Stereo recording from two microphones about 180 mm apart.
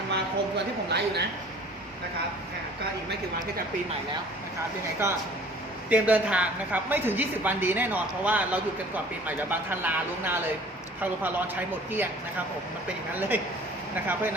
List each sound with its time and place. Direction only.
0.1 s a sound: 70° right (ahead or behind)
5.0 s a woman's voice: 15° right (ahead or behind)
13.1 s a woman's voice: 10° right (ahead or behind)